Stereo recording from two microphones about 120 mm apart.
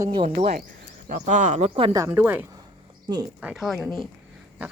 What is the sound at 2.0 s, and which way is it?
Speech, 15° right (ahead or behind).